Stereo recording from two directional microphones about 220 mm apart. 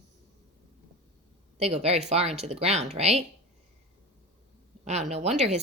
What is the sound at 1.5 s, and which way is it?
Speech, 30° right (ahead or behind).